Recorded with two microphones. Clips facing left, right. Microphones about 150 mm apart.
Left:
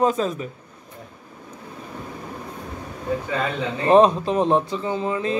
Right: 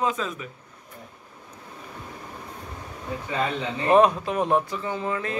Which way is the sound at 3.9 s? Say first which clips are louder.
Left 3 dB; 25° left (ahead or behind).